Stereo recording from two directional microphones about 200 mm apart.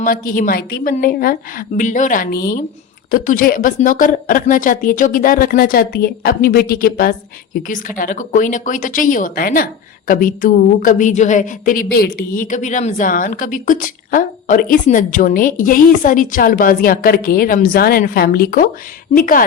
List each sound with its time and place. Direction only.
0.0 s a woman's voice: 45° left (ahead or behind)